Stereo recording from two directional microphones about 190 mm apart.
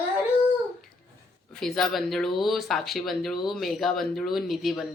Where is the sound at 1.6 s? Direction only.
Centre (ahead or behind).